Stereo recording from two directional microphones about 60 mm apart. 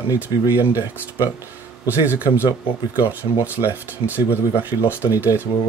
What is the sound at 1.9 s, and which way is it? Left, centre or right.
Speech, right.